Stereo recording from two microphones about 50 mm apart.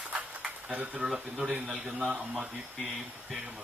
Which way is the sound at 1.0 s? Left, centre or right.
Centre.